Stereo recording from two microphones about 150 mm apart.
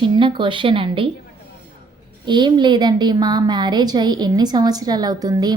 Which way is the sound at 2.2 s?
30° right (ahead or behind).